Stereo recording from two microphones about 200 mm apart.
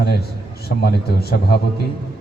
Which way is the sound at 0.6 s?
55° left (ahead or behind).